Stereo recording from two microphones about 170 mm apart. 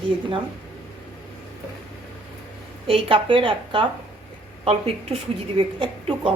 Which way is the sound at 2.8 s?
35° right (ahead or behind).